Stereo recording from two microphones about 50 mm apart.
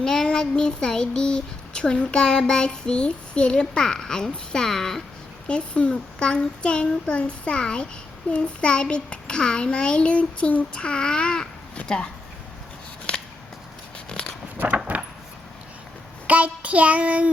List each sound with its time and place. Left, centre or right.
0.0 s child singing: centre
5.5 s a child's voice: left
14.9 s a sound: right
16.2 s child singing: right